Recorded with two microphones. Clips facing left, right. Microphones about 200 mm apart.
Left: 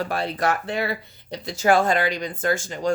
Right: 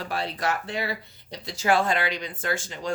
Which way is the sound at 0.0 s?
50° left (ahead or behind).